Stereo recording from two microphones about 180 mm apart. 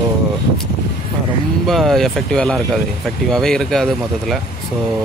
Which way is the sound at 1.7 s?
Centre (ahead or behind).